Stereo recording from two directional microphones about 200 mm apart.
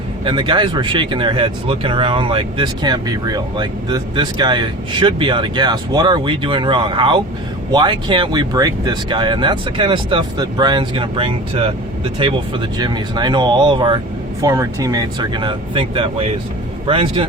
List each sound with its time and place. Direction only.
0.3 s speech: 25° right (ahead or behind)